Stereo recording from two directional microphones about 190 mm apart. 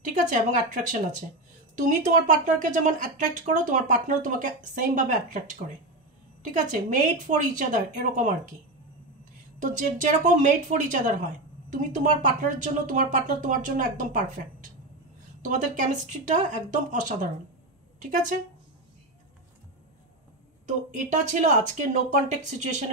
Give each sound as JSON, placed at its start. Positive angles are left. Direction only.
{"t": 0.1, "sound": "speech", "side_deg": -40}
{"t": 9.6, "sound": "speech", "side_deg": -40}
{"t": 20.6, "sound": "speech", "side_deg": -40}